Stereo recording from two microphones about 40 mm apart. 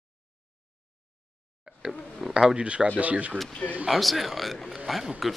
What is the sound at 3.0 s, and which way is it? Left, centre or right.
Speech, right.